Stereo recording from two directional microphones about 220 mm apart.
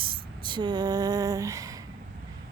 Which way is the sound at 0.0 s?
25° right (ahead or behind).